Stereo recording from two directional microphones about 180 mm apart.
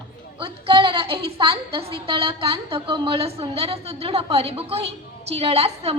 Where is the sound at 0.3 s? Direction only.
30° right (ahead or behind).